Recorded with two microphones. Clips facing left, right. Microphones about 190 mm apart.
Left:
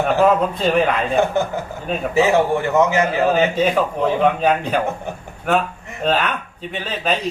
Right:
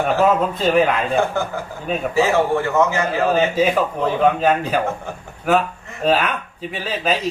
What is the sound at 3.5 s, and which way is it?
A man's voice, 5° right (ahead or behind).